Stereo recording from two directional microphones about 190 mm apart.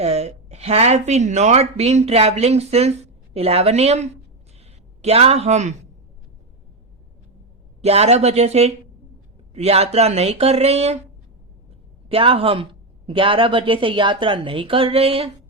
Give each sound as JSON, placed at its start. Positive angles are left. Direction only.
{"t": 0.0, "sound": "speech", "side_deg": -35}
{"t": 4.6, "sound": "a sound", "side_deg": -35}
{"t": 7.8, "sound": "speech", "side_deg": -35}
{"t": 12.0, "sound": "speech", "side_deg": -30}